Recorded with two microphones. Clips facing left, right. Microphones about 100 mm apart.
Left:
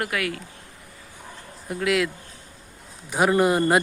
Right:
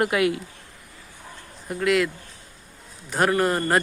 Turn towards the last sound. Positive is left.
turn(degrees=10)  # may be behind; listen again after turning